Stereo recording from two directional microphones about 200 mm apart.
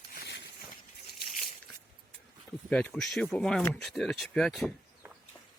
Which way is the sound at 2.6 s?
5° left (ahead or behind).